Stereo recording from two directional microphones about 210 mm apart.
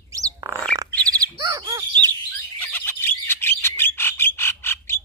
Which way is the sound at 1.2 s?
20° right (ahead or behind).